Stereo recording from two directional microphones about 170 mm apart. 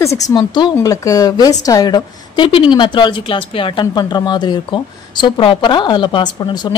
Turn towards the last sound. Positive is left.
turn(degrees=30)  # may be behind; listen again after turning